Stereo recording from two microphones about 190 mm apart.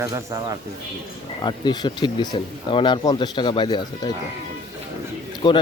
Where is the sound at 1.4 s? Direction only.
20° left (ahead or behind).